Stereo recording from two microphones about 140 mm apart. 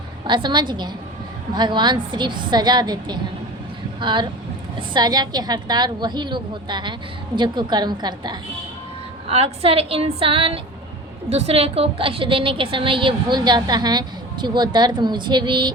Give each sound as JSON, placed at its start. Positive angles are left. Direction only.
{"t": 0.3, "sound": "a woman's voice", "side_deg": -35}
{"t": 9.2, "sound": "a woman's voice", "side_deg": -45}